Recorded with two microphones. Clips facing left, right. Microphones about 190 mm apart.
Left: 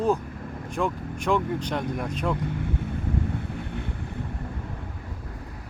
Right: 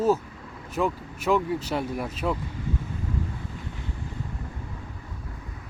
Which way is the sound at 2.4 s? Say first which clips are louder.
Left 3 dB; 60° left (ahead or behind).